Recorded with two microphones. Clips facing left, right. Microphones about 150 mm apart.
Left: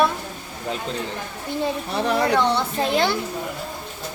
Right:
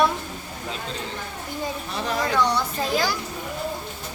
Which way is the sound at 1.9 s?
65° left (ahead or behind).